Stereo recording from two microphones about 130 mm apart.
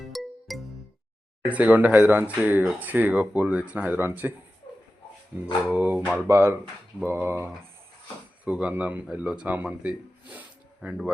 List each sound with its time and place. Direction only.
0.0 s music: centre (ahead or behind)
1.5 s speech: 10° right (ahead or behind)
5.7 s speech: 10° right (ahead or behind)